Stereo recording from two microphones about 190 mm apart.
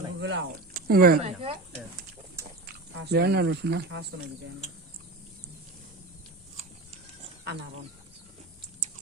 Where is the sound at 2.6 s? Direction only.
65° right (ahead or behind).